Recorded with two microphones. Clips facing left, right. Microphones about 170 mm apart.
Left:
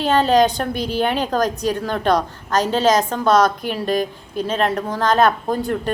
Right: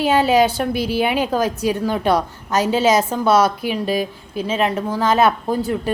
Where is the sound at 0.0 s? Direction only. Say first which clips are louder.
Even; 10° right (ahead or behind).